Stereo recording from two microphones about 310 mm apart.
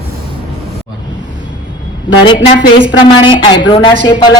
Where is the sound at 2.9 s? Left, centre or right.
Centre.